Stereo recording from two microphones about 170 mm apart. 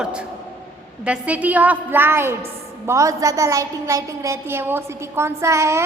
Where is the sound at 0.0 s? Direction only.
5° right (ahead or behind).